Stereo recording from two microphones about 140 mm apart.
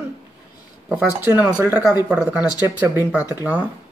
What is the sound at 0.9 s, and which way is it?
Speech, 15° right (ahead or behind).